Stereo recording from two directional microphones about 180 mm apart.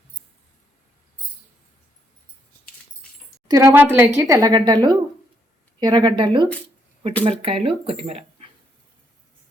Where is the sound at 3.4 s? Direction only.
20° right (ahead or behind); by 8.5 s 35° right (ahead or behind).